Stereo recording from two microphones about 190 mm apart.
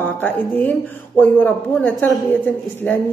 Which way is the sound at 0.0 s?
10° left (ahead or behind).